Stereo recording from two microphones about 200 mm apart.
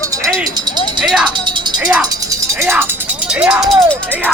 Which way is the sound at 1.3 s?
25° right (ahead or behind).